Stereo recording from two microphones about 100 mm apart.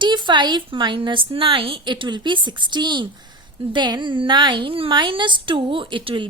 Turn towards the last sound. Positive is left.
turn(degrees=-55)  # may be behind; listen again after turning